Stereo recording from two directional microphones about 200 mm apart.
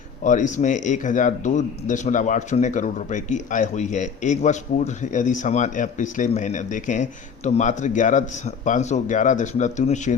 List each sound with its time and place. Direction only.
0.3 s a man's voice: 40° left (ahead or behind)